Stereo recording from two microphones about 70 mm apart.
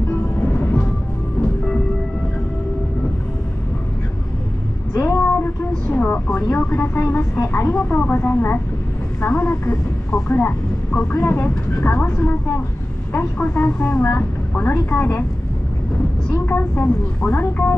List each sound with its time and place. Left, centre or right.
0.1 s music: left
4.9 s a sound: left
6.5 s speech: left
9.2 s a woman's voice: centre
16.4 s a woman's voice: left